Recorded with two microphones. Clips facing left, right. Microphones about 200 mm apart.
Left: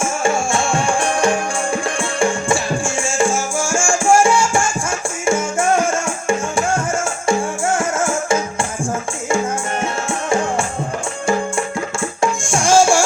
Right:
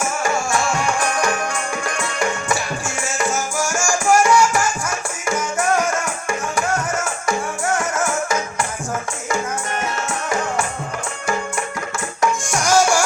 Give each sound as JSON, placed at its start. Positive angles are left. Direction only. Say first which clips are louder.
{"t": 0.0, "sound": "music", "louder": "left 3 dB", "side_deg": 25}
{"t": 10.1, "sound": "music", "louder": "left 7 dB", "side_deg": 30}
{"t": 12.2, "sound": "music", "louder": "left 1 dB", "side_deg": 30}